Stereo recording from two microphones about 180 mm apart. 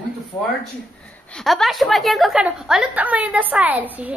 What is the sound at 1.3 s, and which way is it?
A woman's voice, 5° left (ahead or behind).